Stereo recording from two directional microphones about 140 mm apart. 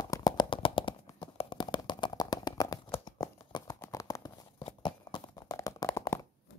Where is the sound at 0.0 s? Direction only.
25° left (ahead or behind).